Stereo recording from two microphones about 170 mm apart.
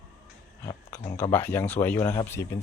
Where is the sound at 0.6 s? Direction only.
15° left (ahead or behind).